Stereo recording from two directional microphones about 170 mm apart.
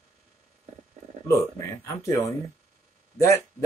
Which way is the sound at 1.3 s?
20° left (ahead or behind).